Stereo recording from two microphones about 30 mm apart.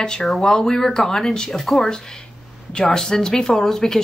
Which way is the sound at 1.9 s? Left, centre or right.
Left.